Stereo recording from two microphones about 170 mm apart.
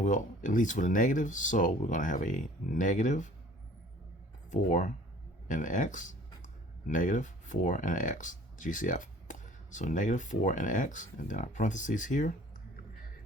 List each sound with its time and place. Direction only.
0.0 s speech: 50° left (ahead or behind)
4.5 s speech: 45° left (ahead or behind)